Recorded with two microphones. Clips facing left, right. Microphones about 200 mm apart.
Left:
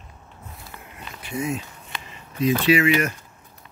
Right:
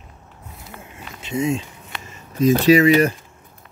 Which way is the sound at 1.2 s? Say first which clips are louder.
Right 6 dB; 25° right (ahead or behind).